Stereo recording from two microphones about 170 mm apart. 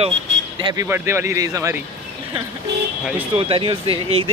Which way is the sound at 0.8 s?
15° right (ahead or behind).